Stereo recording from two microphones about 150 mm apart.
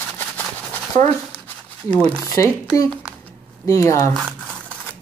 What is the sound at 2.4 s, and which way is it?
Speech, 20° left (ahead or behind).